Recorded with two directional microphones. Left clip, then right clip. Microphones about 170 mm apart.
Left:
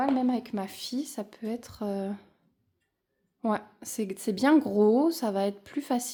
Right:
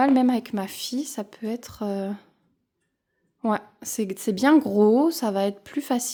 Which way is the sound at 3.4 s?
25° right (ahead or behind).